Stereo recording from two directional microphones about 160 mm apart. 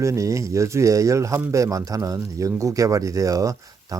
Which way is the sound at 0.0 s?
20° right (ahead or behind).